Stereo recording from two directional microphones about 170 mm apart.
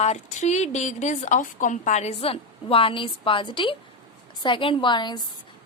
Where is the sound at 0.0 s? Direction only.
40° left (ahead or behind).